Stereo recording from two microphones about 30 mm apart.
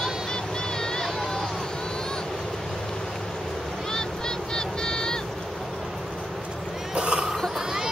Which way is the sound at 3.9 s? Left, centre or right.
Left.